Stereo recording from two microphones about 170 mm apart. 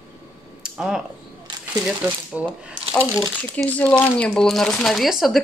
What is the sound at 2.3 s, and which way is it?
Speech, 10° right (ahead or behind).